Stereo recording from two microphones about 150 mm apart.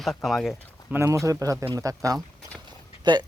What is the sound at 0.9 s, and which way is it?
Speech, 20° right (ahead or behind).